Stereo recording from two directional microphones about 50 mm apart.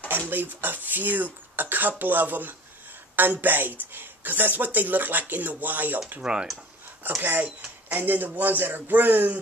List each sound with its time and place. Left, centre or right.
0.3 s speech: right
6.2 s speech: centre
7.1 s speech: right